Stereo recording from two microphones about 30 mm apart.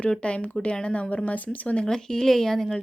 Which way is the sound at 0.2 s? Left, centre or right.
Left.